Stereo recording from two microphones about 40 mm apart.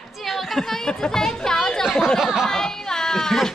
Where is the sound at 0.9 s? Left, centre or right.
Centre.